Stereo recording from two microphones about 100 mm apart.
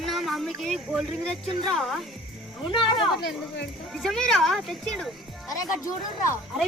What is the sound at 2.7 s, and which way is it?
Speech, 55° left (ahead or behind).